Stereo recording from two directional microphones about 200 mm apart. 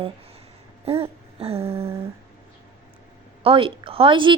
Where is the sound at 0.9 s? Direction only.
30° right (ahead or behind).